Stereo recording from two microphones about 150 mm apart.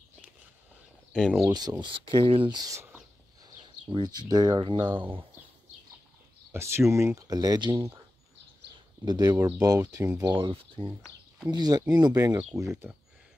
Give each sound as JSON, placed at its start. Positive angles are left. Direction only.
{"t": 1.1, "sound": "speech", "side_deg": 0}
{"t": 1.4, "sound": "speech", "side_deg": -25}
{"t": 2.7, "sound": "speech", "side_deg": -15}
{"t": 3.9, "sound": "speech", "side_deg": -30}
{"t": 6.5, "sound": "speech", "side_deg": -15}
{"t": 9.0, "sound": "speech", "side_deg": -25}